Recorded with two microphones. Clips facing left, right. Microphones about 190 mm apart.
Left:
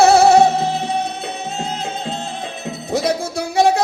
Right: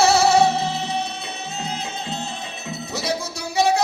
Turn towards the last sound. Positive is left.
turn(degrees=55)  # may be behind; listen again after turning